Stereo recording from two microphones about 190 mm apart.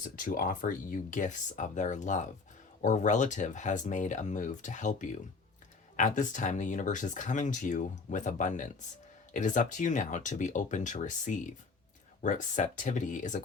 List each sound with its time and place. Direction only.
0.3 s speech: 45° left (ahead or behind)